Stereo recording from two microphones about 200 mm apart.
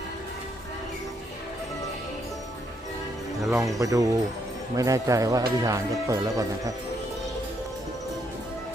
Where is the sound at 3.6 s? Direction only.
15° right (ahead or behind).